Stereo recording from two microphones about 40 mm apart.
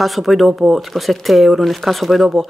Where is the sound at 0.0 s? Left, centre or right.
Centre.